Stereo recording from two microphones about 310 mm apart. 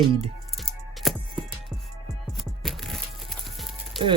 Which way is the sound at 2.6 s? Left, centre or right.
Centre.